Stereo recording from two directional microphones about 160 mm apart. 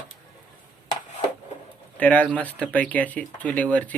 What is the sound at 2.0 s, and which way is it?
Speech, 10° left (ahead or behind).